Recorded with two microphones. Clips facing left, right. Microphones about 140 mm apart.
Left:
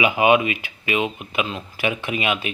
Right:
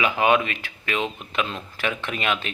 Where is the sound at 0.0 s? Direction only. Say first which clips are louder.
Left 3 dB; 10° left (ahead or behind).